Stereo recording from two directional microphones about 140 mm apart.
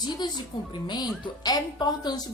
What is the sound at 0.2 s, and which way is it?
A woman's voice, 30° left (ahead or behind).